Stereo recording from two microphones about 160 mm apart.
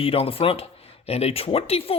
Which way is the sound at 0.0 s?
35° left (ahead or behind).